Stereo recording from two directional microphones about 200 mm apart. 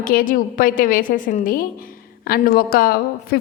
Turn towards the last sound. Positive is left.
turn(degrees=45)  # may be behind; listen again after turning